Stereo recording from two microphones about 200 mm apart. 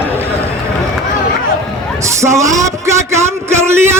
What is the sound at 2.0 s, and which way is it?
A man's voice, 15° right (ahead or behind).